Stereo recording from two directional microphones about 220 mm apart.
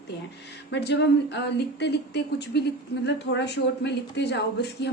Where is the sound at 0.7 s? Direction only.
50° left (ahead or behind).